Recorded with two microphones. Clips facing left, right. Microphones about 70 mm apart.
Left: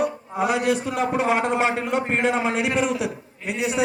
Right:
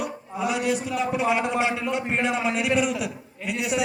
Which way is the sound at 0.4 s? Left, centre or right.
Left.